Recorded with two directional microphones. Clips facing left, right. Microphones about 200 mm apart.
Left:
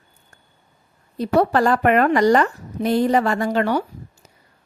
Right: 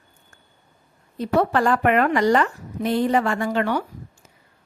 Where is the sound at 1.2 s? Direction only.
35° left (ahead or behind).